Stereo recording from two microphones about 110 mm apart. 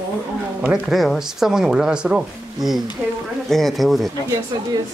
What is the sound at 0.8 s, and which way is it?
Speech, centre (ahead or behind).